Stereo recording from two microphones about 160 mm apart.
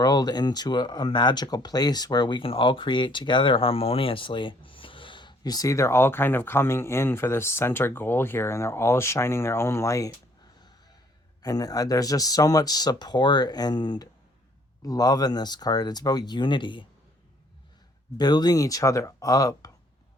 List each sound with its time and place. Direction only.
0.0 s speech: 25° left (ahead or behind)
11.4 s speech: 25° left (ahead or behind)
18.2 s speech: 25° left (ahead or behind)